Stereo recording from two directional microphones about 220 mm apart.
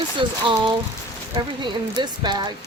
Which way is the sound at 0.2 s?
20° right (ahead or behind).